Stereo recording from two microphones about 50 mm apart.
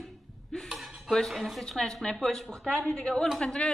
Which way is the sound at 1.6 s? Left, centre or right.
Centre.